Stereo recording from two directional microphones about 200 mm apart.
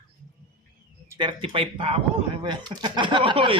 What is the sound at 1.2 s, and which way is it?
A woman's voice, 25° right (ahead or behind).